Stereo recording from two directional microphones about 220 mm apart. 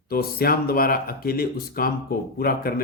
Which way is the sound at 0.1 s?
45° left (ahead or behind).